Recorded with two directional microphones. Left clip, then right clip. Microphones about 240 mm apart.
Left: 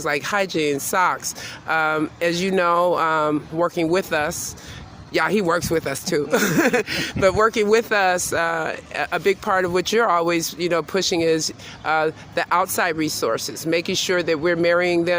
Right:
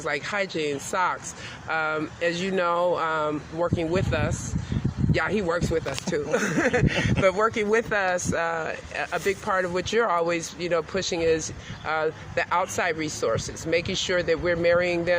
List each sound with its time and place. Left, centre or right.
0.0 s speech: left